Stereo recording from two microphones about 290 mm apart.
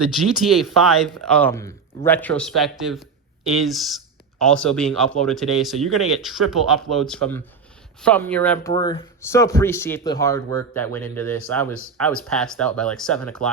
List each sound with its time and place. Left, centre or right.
0.7 s speech: centre